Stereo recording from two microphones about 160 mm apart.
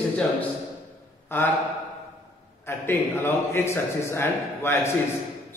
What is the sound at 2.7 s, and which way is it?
Speech, 15° left (ahead or behind).